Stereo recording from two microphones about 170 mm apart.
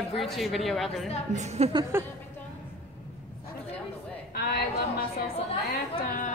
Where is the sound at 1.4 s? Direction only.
40° right (ahead or behind).